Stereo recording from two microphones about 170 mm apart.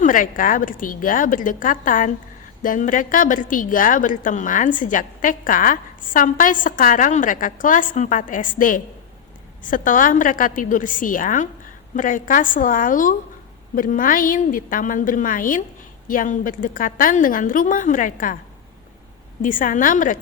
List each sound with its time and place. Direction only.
0.0 s a woman's voice: 55° left (ahead or behind)
19.4 s a woman's voice: 50° left (ahead or behind)